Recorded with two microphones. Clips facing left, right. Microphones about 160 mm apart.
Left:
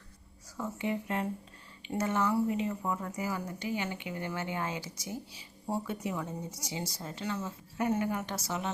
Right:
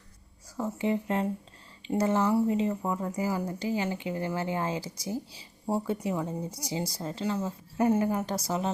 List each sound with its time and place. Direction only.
0.5 s a woman's voice: 30° right (ahead or behind)